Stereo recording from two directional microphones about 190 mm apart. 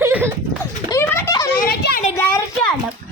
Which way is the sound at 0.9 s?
15° left (ahead or behind).